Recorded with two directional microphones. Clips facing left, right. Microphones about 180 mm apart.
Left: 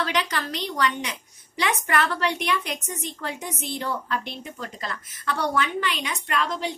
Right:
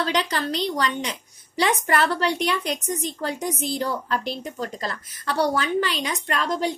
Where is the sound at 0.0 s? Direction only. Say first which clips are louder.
Right 2 dB; 30° right (ahead or behind).